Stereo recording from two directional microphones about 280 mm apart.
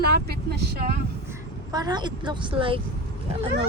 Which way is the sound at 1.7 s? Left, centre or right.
Centre.